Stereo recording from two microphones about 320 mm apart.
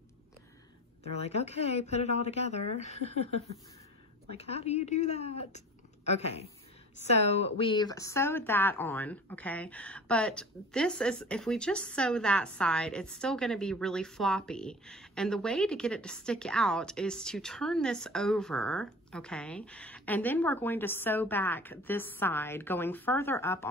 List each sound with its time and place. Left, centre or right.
1.0 s speech: centre
4.4 s speech: centre